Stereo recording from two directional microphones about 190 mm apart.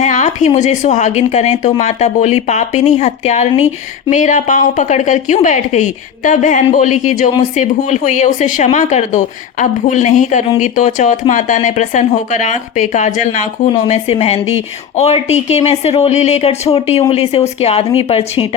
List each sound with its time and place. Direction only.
0.0 s speech: 40° left (ahead or behind)